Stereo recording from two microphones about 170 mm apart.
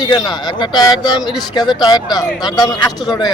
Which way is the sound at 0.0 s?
25° left (ahead or behind).